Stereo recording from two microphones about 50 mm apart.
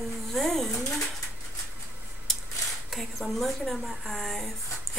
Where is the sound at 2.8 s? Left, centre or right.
Centre.